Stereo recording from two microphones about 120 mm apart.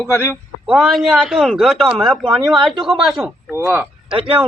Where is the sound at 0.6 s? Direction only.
5° right (ahead or behind).